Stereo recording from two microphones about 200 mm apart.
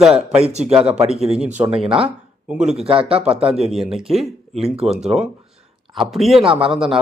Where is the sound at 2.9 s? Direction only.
30° right (ahead or behind).